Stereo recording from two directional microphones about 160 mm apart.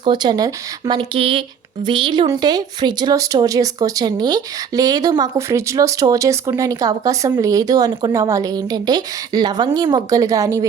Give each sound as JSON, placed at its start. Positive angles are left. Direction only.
{"t": 0.0, "sound": "speech", "side_deg": -30}